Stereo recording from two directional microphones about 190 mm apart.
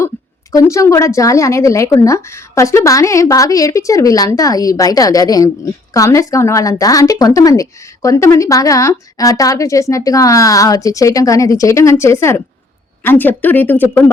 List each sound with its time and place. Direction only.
0.5 s a woman's voice: 15° left (ahead or behind)